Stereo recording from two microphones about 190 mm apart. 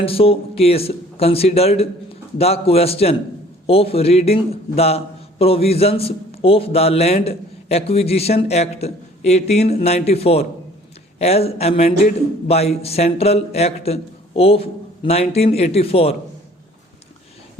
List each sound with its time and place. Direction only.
0.0 s a man's voice: 30° left (ahead or behind)